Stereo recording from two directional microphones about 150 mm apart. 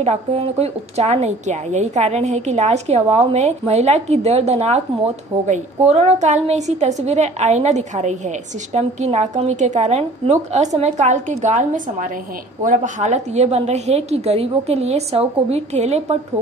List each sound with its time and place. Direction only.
0.0 s a woman's voice: 40° right (ahead or behind)